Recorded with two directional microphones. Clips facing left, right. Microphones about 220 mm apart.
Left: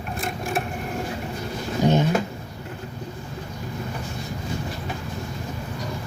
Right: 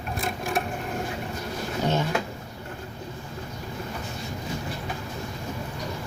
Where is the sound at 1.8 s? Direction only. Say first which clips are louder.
Left 6 dB; 15° left (ahead or behind).